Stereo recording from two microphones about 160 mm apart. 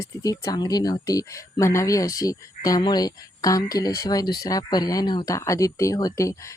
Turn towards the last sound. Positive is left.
turn(degrees=20)  # may be behind; listen again after turning